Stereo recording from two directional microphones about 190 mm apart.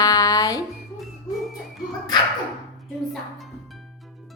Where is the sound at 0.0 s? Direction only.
20° left (ahead or behind).